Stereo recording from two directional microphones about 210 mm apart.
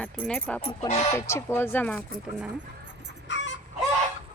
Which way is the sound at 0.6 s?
30° left (ahead or behind).